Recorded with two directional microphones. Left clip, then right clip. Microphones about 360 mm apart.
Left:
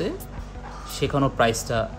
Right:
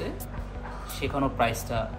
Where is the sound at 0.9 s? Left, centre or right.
Left.